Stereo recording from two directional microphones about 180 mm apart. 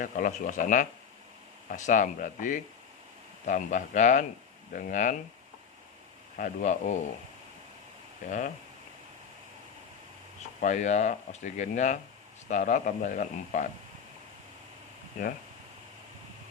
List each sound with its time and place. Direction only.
0.0 s speech: 45° left (ahead or behind)
6.3 s speech: 45° left (ahead or behind)
8.3 s speech: 45° left (ahead or behind)
10.6 s speech: 40° left (ahead or behind)